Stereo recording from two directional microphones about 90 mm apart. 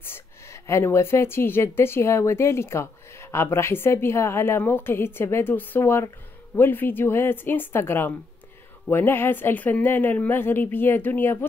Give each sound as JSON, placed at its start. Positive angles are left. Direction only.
{"t": 0.0, "sound": "speech", "side_deg": 30}